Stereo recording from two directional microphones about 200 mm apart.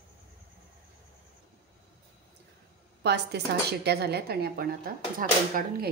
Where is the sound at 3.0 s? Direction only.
55° right (ahead or behind).